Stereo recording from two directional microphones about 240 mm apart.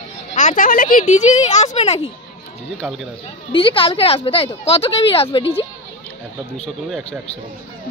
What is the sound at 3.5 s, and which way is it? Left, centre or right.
Speech, left.